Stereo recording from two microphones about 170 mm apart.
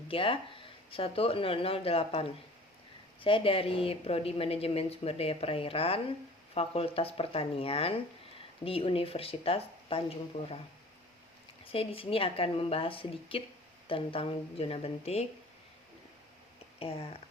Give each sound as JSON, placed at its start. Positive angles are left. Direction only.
{"t": 0.1, "sound": "a woman's voice", "side_deg": 30}
{"t": 11.6, "sound": "a woman's voice", "side_deg": 35}
{"t": 16.8, "sound": "a woman's voice", "side_deg": 35}